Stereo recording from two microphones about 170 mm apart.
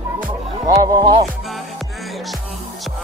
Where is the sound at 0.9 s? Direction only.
25° right (ahead or behind).